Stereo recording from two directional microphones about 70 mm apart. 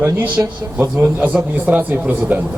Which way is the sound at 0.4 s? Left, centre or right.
Right.